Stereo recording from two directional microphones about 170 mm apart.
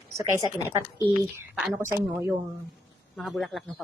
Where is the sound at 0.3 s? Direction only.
20° right (ahead or behind).